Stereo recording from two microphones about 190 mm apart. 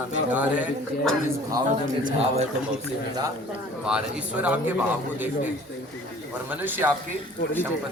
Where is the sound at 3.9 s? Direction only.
5° right (ahead or behind).